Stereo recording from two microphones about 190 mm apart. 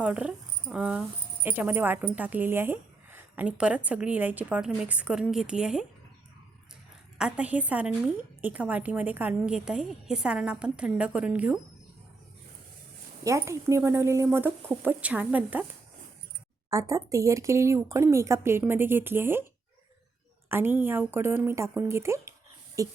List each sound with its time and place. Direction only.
0.0 s speech: 5° right (ahead or behind)
7.2 s speech: 5° right (ahead or behind)
13.2 s speech: 15° right (ahead or behind)
16.6 s speech: 15° right (ahead or behind)
20.5 s a woman's voice: 10° right (ahead or behind)